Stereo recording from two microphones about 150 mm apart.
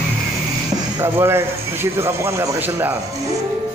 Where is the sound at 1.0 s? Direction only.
15° right (ahead or behind).